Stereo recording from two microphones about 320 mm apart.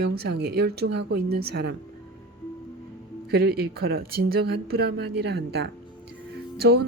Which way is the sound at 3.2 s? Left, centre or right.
Right.